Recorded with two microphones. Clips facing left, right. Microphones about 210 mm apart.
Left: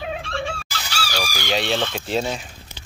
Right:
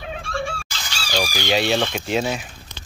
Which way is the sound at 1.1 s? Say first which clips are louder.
Right 4 dB; 15° right (ahead or behind).